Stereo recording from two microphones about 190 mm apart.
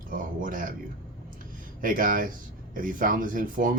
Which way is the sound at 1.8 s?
45° right (ahead or behind).